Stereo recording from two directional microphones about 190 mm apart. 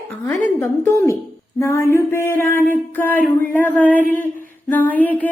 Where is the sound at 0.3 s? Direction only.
10° left (ahead or behind).